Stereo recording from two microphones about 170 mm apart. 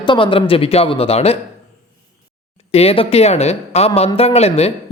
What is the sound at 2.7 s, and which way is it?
A woman's voice, 35° left (ahead or behind).